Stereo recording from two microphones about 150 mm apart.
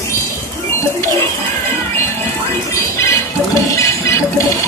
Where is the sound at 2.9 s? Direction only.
20° left (ahead or behind).